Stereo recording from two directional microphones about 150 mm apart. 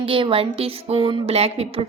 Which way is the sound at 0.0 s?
35° right (ahead or behind).